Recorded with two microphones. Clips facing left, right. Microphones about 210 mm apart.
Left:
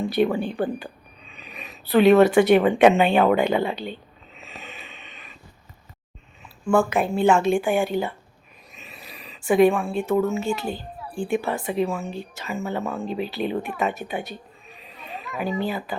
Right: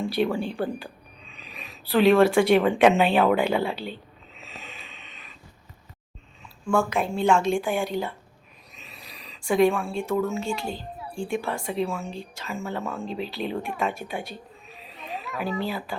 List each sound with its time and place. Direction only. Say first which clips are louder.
0.2 s a woman's voice: left 4 dB; centre (ahead or behind)
4.4 s snort: left 3 dB; centre (ahead or behind)
6.4 s a woman's voice: left 4 dB; 5° left (ahead or behind)
10.8 s a sound: left 2 dB; 25° right (ahead or behind)
11.3 s a woman's voice: left 4 dB; 5° left (ahead or behind)
13.1 s speech: left 4 dB; 55° left (ahead or behind)
13.3 s speech: left 3 dB; centre (ahead or behind)